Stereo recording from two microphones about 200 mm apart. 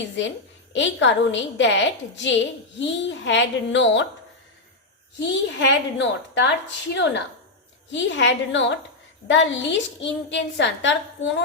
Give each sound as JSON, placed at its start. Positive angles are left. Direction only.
{"t": 0.7, "sound": "a woman's voice", "side_deg": 65}
{"t": 5.2, "sound": "a woman's voice", "side_deg": 65}